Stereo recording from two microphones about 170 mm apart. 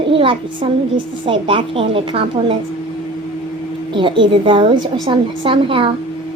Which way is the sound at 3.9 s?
30° right (ahead or behind).